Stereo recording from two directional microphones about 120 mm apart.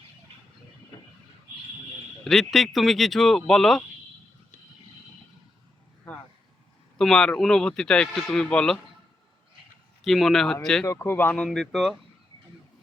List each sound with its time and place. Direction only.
0.9 s vehicle: 30° left (ahead or behind)
2.2 s speech: centre (ahead or behind)
6.1 s a sound: 10° left (ahead or behind)
7.0 s speech: 5° left (ahead or behind)
10.0 s speech: centre (ahead or behind)
10.8 s speech: 20° left (ahead or behind)
11.4 s speech: 5° left (ahead or behind)